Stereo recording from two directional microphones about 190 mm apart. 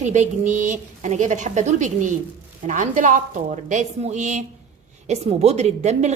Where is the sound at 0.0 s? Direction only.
40° right (ahead or behind).